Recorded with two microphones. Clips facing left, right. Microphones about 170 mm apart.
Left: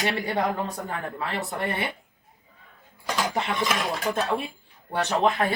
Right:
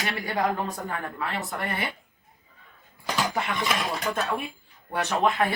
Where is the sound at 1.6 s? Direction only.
20° left (ahead or behind).